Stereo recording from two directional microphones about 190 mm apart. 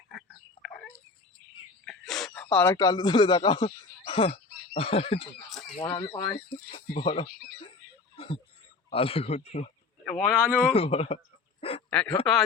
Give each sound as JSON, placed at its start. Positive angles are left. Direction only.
{"t": 0.1, "sound": "a sound", "side_deg": 0}
{"t": 1.8, "sound": "speech", "side_deg": 0}
{"t": 5.5, "sound": "chicken", "side_deg": 0}
{"t": 5.7, "sound": "speech", "side_deg": 25}
{"t": 8.1, "sound": "a sound", "side_deg": 25}
{"t": 8.9, "sound": "speech", "side_deg": 30}
{"t": 10.0, "sound": "speech", "side_deg": 0}
{"t": 10.7, "sound": "speech", "side_deg": 30}
{"t": 11.9, "sound": "speech", "side_deg": 5}